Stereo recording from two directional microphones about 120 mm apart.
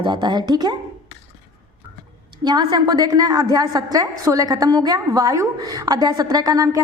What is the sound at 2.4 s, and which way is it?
A woman's voice, 35° right (ahead or behind).